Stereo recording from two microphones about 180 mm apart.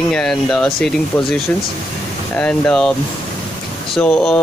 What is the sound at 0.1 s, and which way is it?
Speech, 5° left (ahead or behind).